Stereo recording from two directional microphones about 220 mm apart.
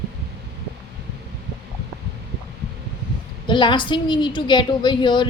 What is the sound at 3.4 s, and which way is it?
A woman's voice, 20° left (ahead or behind).